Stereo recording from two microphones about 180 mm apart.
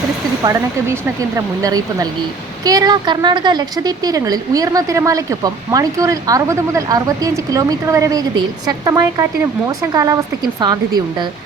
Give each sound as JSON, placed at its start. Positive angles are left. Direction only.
{"t": 1.6, "sound": "a woman's voice", "side_deg": -20}